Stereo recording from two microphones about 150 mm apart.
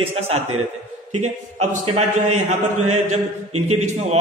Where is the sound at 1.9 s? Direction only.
45° right (ahead or behind).